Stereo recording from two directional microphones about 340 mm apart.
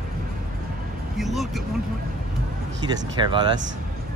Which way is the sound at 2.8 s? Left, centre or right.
Centre.